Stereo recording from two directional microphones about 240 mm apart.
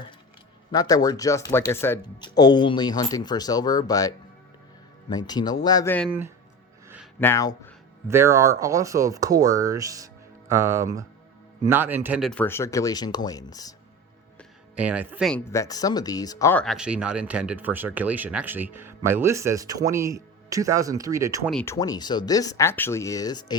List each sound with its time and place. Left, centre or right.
0.7 s speech: centre
6.1 s speech: centre
7.2 s speech: centre
8.0 s speech: centre
14.3 s music: centre
15.3 s speech: centre
21.5 s speech: centre